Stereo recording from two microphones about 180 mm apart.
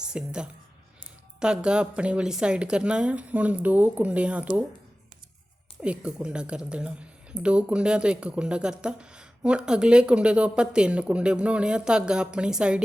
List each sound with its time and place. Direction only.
0.0 s a woman's voice: 5° right (ahead or behind)
5.8 s speech: 5° right (ahead or behind)